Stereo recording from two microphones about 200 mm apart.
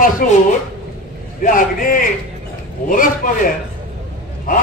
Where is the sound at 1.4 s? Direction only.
45° left (ahead or behind).